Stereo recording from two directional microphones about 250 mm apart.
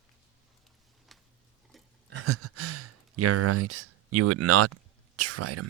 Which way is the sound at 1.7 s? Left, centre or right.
Centre.